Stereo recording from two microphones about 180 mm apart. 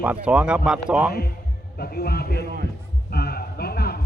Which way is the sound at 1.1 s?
55° left (ahead or behind).